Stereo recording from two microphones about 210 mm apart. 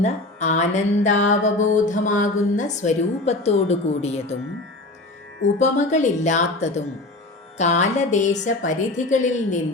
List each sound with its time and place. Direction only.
0.0 s music: 35° left (ahead or behind)
5.5 s music: 35° left (ahead or behind)